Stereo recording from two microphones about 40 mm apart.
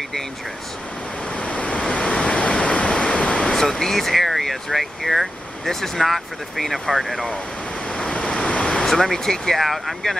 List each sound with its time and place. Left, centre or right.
1.3 s waves: left
1.8 s waves: centre
3.2 s a sound: left
3.5 s speech: centre
7.9 s waves: left
8.6 s speech: centre
9.6 s speech: centre